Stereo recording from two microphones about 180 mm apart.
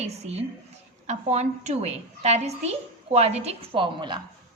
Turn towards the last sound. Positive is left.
turn(degrees=-25)  # may be behind; listen again after turning